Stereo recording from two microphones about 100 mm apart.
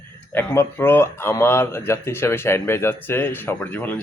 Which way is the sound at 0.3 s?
20° left (ahead or behind).